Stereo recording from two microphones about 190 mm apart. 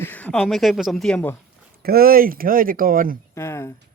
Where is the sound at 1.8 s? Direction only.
50° right (ahead or behind).